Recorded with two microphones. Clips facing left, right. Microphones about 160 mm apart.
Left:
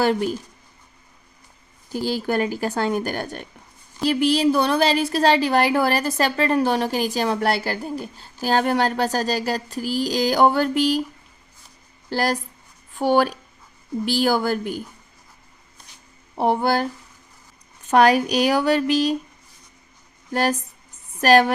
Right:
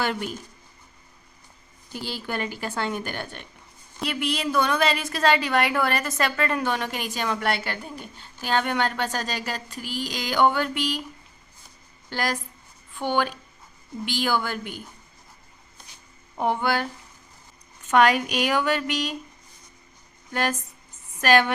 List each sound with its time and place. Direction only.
0.0 s a woman's voice: 35° left (ahead or behind)
1.9 s a woman's voice: 40° left (ahead or behind)
12.0 s a woman's voice: 35° left (ahead or behind)
16.4 s a woman's voice: 35° left (ahead or behind)
17.9 s a woman's voice: 35° left (ahead or behind)
20.3 s a woman's voice: 35° left (ahead or behind)